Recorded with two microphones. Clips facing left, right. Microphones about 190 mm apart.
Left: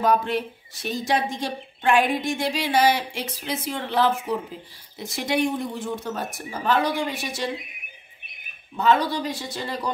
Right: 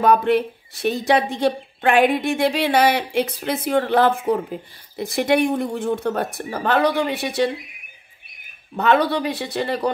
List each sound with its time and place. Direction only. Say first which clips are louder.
0.0 s a woman's voice: right 5 dB; 60° right (ahead or behind)
8.7 s a woman's voice: right 3 dB; 65° right (ahead or behind)